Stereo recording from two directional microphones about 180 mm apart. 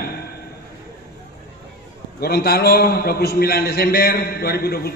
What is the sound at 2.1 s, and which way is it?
A man's voice, 60° left (ahead or behind).